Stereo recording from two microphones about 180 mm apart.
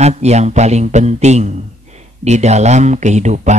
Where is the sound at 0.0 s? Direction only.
40° right (ahead or behind).